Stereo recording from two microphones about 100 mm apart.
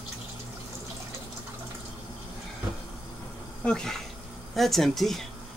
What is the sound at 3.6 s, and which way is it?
Speech, 10° left (ahead or behind).